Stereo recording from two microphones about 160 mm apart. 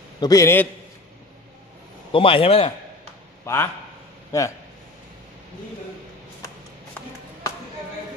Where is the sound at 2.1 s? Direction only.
35° left (ahead or behind).